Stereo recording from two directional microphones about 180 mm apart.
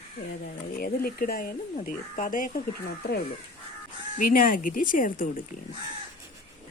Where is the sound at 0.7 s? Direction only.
55° left (ahead or behind).